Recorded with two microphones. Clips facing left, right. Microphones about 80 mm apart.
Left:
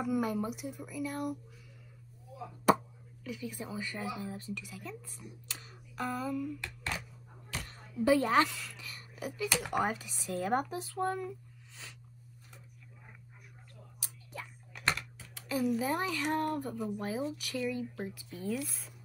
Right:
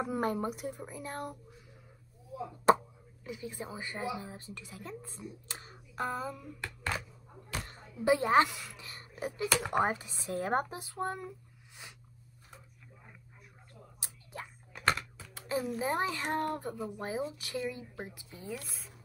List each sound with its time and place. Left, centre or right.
0.2 s speech: right
3.3 s a woman's voice: right
13.9 s scissors: right
15.3 s speech: right